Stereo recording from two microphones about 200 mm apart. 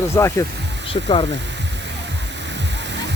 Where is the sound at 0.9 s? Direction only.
30° left (ahead or behind).